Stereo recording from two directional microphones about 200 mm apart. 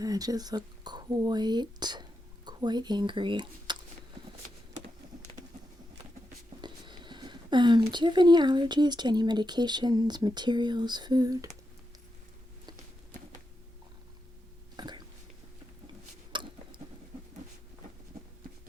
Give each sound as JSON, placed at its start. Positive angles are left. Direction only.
{"t": 0.0, "sound": "speech", "side_deg": -20}
{"t": 6.6, "sound": "speech", "side_deg": -20}
{"t": 14.8, "sound": "whispering", "side_deg": -20}
{"t": 16.3, "sound": "a sound", "side_deg": -25}